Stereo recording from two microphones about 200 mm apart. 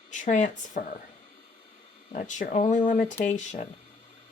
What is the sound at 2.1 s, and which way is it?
Speech, 40° left (ahead or behind).